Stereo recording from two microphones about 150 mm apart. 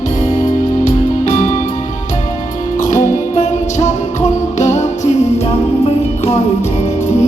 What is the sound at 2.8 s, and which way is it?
Music, 55° left (ahead or behind).